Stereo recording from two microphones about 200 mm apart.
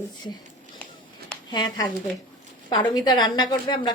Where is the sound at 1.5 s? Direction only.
20° left (ahead or behind).